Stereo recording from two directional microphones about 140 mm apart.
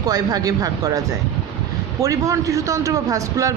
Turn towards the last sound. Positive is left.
turn(degrees=-25)  # may be behind; listen again after turning